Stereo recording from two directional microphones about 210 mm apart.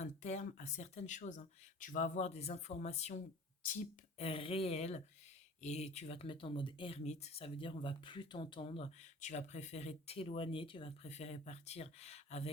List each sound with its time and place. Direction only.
0.0 s speech: 35° left (ahead or behind)